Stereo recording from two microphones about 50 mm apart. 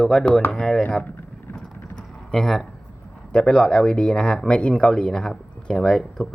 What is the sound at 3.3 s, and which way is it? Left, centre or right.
Speech, centre.